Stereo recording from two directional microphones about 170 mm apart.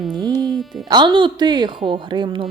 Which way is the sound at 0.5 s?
Centre (ahead or behind).